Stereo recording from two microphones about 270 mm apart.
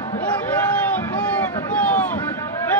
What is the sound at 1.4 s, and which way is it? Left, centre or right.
Boat, centre.